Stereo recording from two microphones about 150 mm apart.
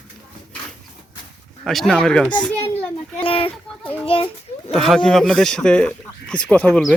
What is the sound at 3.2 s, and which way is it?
A child's voice, 35° left (ahead or behind).